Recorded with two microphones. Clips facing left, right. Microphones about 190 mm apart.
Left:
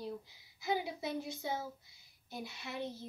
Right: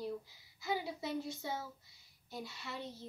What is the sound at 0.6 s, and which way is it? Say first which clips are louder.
A woman's voice: left 2 dB; 15° left (ahead or behind).